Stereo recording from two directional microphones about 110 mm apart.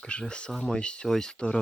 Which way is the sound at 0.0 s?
5° left (ahead or behind).